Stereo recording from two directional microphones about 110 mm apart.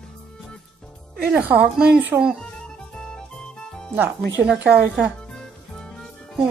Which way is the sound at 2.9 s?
5° left (ahead or behind).